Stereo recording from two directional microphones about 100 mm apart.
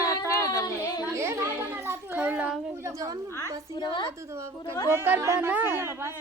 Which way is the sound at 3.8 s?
50° left (ahead or behind).